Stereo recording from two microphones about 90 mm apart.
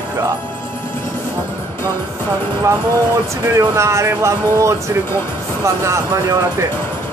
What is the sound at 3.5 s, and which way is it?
Speech, 35° right (ahead or behind).